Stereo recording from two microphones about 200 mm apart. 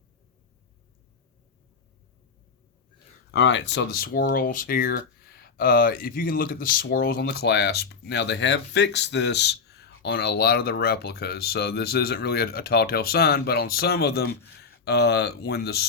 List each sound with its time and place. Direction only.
3.3 s speech: 65° left (ahead or behind)